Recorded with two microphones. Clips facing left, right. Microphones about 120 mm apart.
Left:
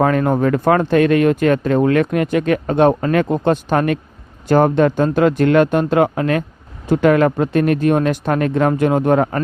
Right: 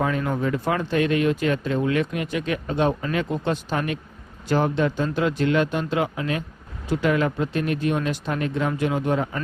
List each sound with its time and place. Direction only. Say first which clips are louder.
0.0 s speech: left 9 dB; 55° left (ahead or behind)